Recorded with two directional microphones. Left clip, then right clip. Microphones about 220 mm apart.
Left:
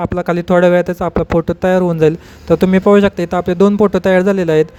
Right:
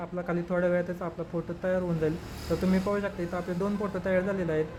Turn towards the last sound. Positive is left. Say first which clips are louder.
# left 16 dB
turn(degrees=40)  # may be behind; listen again after turning